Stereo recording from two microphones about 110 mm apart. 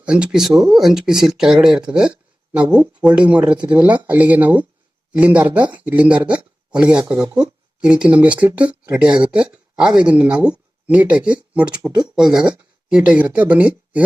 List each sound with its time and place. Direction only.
0.0 s speech: 10° right (ahead or behind)
7.0 s speech: 35° right (ahead or behind)
7.8 s speech: 10° right (ahead or behind)